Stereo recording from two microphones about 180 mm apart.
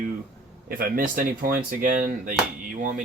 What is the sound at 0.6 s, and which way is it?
Speech, 55° right (ahead or behind).